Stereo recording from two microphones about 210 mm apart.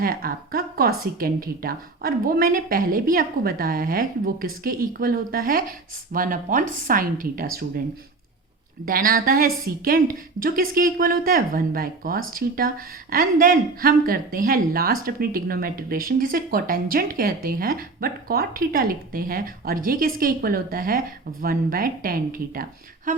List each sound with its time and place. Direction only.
0.0 s a woman's voice: 45° right (ahead or behind)
8.8 s speech: 45° right (ahead or behind)